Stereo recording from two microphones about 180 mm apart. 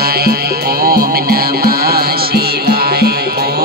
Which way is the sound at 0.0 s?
60° right (ahead or behind).